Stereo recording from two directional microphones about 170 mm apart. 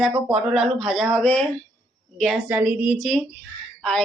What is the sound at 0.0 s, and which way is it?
Speech, centre (ahead or behind).